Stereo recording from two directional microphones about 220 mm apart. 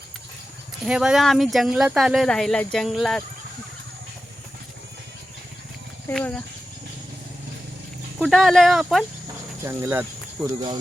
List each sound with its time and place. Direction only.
0.9 s speech: 5° right (ahead or behind)
6.1 s speech: 5° left (ahead or behind)
8.2 s speech: centre (ahead or behind)